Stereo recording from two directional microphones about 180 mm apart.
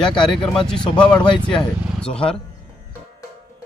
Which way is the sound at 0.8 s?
25° left (ahead or behind).